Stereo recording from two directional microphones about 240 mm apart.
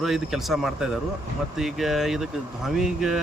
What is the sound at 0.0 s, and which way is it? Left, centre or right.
Speech, centre.